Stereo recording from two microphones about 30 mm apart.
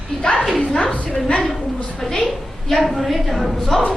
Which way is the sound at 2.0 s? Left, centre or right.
Centre.